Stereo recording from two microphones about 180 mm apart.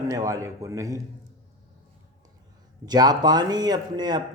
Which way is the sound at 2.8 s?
20° right (ahead or behind).